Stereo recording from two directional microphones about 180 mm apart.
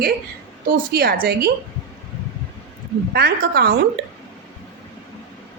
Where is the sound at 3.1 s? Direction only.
65° right (ahead or behind).